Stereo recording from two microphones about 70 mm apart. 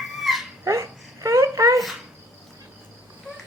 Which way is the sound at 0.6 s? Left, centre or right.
Right.